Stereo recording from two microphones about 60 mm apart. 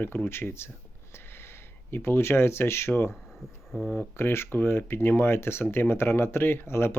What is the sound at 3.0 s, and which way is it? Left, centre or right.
Speech, centre.